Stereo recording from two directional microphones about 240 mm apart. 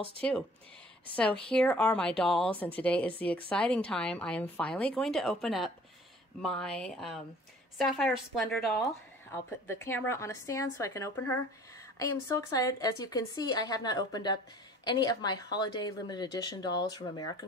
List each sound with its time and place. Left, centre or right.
0.2 s speech: centre